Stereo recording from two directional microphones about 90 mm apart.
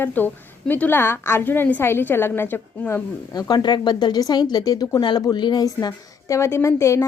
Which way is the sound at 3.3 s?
45° left (ahead or behind).